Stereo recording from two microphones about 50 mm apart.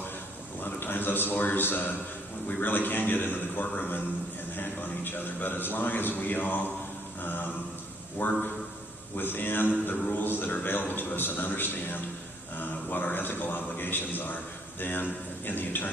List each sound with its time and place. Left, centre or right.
0.6 s a man's voice: left